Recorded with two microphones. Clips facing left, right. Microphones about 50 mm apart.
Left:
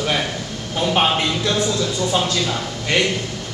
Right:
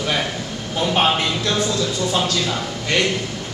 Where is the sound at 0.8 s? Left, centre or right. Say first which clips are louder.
Even; centre.